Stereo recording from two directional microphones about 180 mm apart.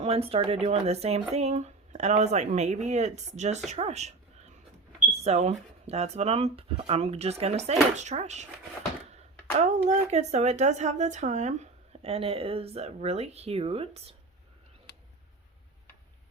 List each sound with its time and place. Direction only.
0.0 s speech: 35° right (ahead or behind)
5.2 s speech: 35° right (ahead or behind)
9.6 s speech: 40° right (ahead or behind)